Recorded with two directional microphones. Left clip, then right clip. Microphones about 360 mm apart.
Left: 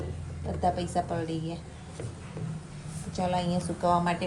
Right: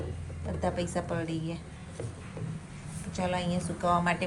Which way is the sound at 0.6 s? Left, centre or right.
Centre.